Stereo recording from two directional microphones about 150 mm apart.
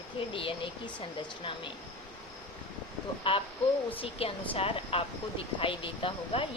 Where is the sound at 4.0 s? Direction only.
40° left (ahead or behind).